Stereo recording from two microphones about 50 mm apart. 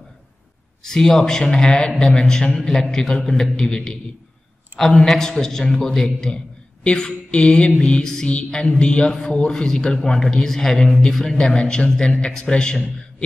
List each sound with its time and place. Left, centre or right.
0.8 s a man's voice: centre
6.3 s a sound: centre
7.1 s a man's voice: left